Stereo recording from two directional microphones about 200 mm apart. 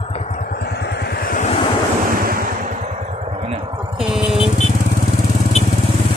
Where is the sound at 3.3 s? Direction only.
30° right (ahead or behind).